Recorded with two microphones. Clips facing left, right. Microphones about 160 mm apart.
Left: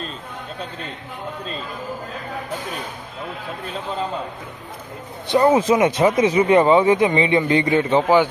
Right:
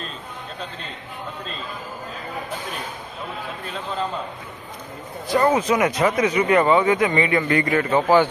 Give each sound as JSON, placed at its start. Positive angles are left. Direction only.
{"t": 5.3, "sound": "speech", "side_deg": 25}